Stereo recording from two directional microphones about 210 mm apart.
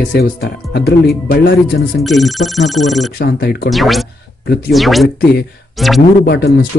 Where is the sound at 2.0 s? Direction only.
Centre (ahead or behind).